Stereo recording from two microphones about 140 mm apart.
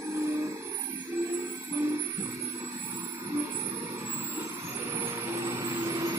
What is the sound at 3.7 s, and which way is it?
Vehicle, 15° right (ahead or behind).